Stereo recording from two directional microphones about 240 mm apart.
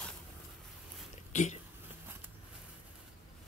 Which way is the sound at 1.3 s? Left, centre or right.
Left.